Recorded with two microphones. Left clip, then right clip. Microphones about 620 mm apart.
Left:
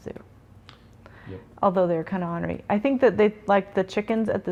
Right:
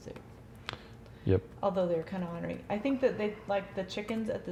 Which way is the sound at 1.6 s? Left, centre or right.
Left.